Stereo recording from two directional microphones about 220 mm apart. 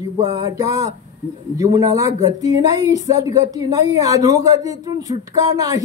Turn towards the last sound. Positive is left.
turn(degrees=-15)  # may be behind; listen again after turning